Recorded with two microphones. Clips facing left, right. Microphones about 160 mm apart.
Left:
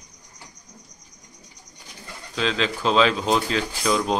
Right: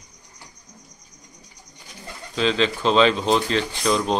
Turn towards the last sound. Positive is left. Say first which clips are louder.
# right 1 dB
turn(degrees=5)  # may be behind; listen again after turning